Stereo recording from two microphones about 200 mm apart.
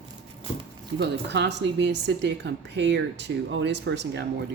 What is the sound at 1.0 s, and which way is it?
A woman's voice, 60° right (ahead or behind).